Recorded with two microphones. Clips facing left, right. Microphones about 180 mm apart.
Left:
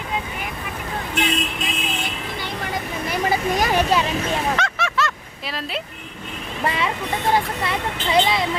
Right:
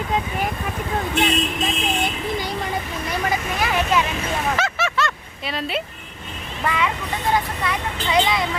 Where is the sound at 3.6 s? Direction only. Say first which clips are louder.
Even; 40° left (ahead or behind).